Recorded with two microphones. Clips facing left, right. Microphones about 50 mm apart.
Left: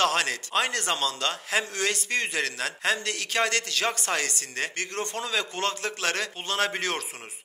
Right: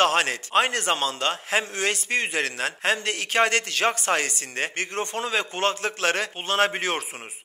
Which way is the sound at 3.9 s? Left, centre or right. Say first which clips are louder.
Right 4 dB; centre.